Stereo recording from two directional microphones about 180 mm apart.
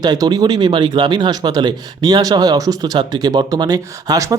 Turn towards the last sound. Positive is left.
turn(degrees=-20)  # may be behind; listen again after turning